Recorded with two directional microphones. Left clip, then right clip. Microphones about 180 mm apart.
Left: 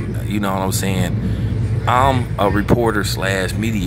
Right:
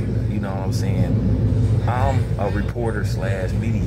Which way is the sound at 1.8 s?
30° left (ahead or behind).